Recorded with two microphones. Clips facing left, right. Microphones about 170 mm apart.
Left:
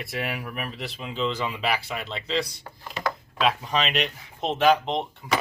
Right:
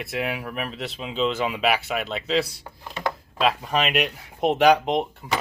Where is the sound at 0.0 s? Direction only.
Centre (ahead or behind).